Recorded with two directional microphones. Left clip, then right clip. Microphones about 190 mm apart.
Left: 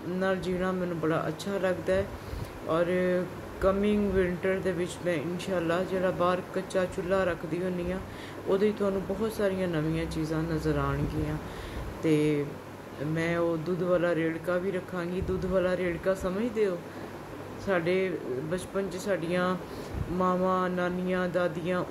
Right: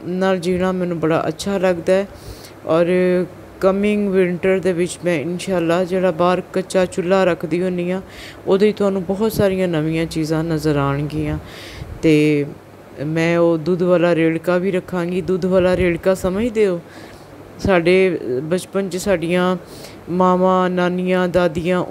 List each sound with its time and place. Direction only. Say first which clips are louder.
0.2 s speech: right 11 dB; 40° right (ahead or behind)
12.0 s speech: right 12 dB; 40° right (ahead or behind)